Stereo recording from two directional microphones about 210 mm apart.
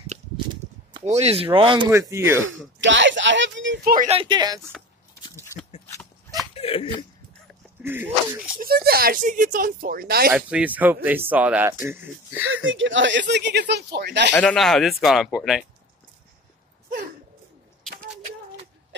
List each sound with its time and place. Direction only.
0.9 s speech: 30° right (ahead or behind)
1.9 s speech: 15° right (ahead or behind)
2.8 s speech: 60° right (ahead or behind)
3.8 s speech: 40° right (ahead or behind)
4.1 s speech: 25° right (ahead or behind)
5.2 s biting: 15° left (ahead or behind)
6.5 s speech: 25° left (ahead or behind)
7.8 s speech: 10° right (ahead or behind)
8.5 s speech: 45° right (ahead or behind)
10.3 s speech: 5° right (ahead or behind)
12.6 s speech: 65° right (ahead or behind)
14.3 s speech: 5° left (ahead or behind)